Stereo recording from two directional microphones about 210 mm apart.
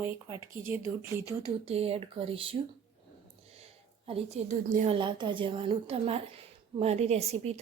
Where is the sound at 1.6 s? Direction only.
30° right (ahead or behind).